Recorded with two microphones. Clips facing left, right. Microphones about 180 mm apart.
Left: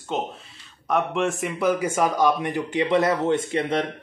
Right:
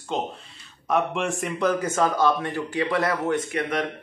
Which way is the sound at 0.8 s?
Centre (ahead or behind).